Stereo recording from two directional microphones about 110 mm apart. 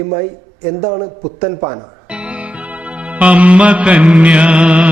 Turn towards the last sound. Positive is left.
turn(degrees=-10)  # may be behind; listen again after turning